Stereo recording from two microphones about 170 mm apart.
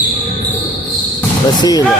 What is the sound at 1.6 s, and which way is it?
Speech, 20° left (ahead or behind).